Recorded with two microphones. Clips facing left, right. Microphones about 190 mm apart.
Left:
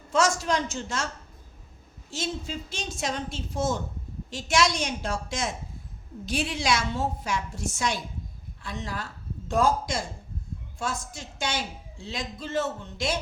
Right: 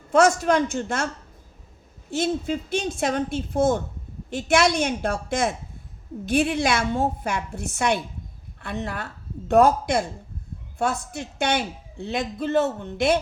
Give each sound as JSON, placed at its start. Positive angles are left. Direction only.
{"t": 0.1, "sound": "a man's voice", "side_deg": -55}
{"t": 2.0, "sound": "a man's voice", "side_deg": -55}